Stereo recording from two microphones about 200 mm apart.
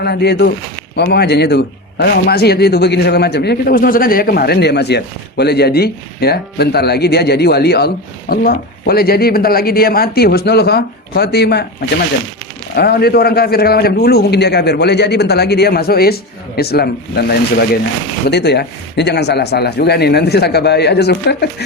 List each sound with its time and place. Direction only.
0.0 s a man's voice: 55° left (ahead or behind)
12.7 s a man's voice: 50° left (ahead or behind)